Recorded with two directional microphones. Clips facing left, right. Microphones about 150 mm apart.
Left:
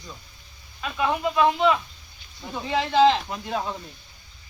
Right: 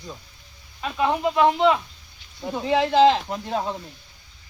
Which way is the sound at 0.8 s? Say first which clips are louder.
Right 2 dB; 30° right (ahead or behind).